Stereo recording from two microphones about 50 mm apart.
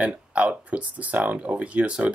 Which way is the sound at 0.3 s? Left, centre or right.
Right.